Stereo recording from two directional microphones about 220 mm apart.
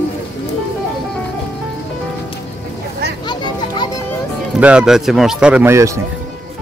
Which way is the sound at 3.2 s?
20° left (ahead or behind).